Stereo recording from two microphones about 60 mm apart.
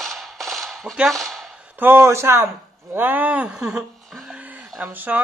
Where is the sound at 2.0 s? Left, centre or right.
Right.